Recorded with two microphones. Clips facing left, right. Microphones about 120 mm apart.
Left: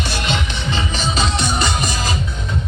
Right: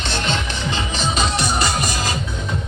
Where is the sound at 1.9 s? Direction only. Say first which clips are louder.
Left 1 dB; 15° left (ahead or behind).